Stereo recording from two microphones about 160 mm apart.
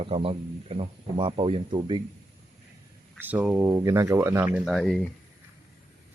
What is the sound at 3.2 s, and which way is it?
Speech, 10° right (ahead or behind).